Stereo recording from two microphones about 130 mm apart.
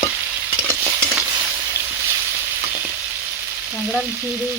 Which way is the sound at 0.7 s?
20° right (ahead or behind).